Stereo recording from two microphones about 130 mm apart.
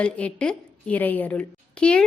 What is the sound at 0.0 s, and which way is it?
A woman's voice, 10° left (ahead or behind).